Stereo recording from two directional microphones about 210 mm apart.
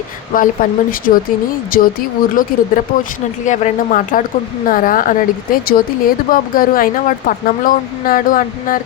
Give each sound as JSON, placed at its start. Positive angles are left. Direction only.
{"t": 0.3, "sound": "speech", "side_deg": 40}